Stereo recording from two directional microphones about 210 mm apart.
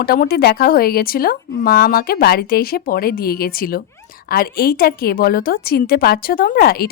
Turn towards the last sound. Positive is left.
turn(degrees=45)  # may be behind; listen again after turning